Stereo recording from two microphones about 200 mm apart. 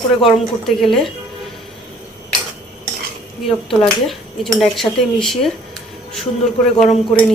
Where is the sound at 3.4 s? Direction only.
Centre (ahead or behind).